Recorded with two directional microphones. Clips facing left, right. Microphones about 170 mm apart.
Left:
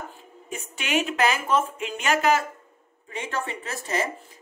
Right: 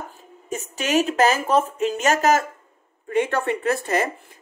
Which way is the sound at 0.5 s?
40° right (ahead or behind).